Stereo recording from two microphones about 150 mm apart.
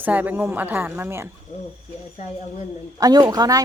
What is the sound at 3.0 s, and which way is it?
Speech, 25° right (ahead or behind).